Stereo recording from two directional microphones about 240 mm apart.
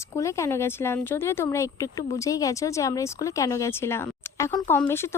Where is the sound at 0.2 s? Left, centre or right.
Centre.